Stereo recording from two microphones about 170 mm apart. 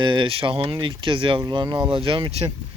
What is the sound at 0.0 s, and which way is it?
Speech, 25° right (ahead or behind).